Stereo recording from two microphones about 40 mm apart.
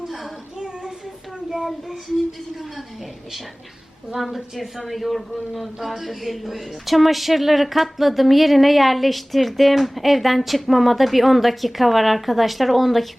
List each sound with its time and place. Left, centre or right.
0.0 s a sound: centre
1.5 s child singing: centre
4.2 s a man's voice: centre